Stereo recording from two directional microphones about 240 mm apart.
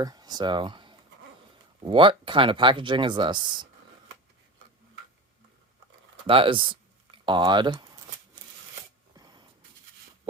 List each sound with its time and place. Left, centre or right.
0.0 s speech: centre
6.2 s speech: right
9.1 s a sound: centre